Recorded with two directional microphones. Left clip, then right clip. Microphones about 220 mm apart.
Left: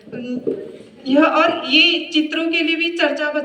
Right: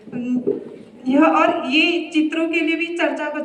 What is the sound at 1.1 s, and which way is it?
A woman's voice, 20° left (ahead or behind).